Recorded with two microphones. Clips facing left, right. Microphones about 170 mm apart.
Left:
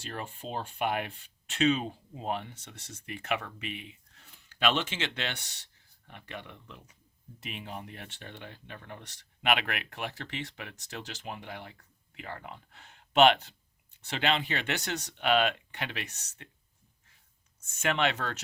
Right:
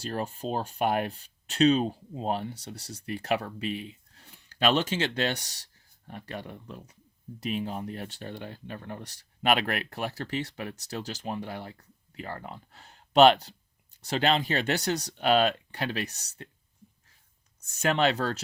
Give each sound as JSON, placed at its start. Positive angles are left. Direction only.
{"t": 0.0, "sound": "speech", "side_deg": -40}
{"t": 17.6, "sound": "speech", "side_deg": -35}